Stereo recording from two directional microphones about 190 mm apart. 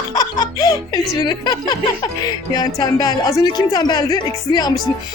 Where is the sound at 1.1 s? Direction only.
20° left (ahead or behind).